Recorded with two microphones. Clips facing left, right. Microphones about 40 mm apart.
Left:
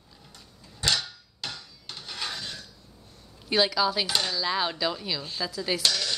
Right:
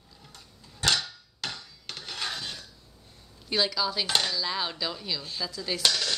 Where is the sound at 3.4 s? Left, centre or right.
Centre.